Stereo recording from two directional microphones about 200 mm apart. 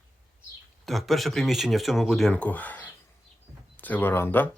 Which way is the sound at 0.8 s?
Centre (ahead or behind).